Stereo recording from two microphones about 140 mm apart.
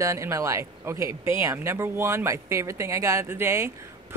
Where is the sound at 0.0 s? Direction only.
20° right (ahead or behind).